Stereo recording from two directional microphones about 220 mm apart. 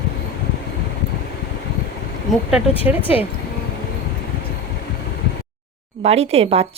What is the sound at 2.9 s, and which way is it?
Speech, 10° right (ahead or behind).